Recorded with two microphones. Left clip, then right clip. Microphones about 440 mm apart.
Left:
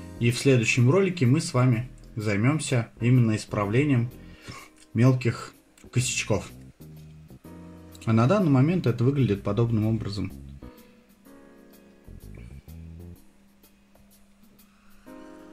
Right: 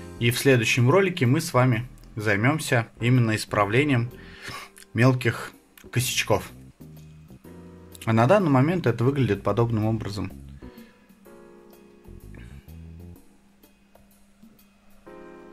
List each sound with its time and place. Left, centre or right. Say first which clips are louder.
0.2 s speech: right 2 dB; centre
8.0 s speech: right 4 dB; centre